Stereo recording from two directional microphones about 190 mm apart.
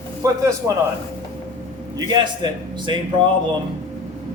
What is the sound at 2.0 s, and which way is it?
Speech, 25° right (ahead or behind).